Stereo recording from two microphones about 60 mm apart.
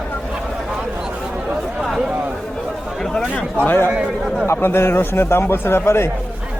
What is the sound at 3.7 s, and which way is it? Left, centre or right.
Speech, left.